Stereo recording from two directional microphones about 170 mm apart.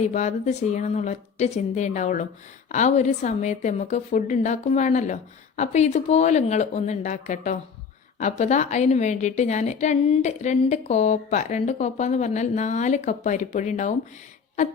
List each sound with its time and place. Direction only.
0.0 s a woman's voice: 45° left (ahead or behind)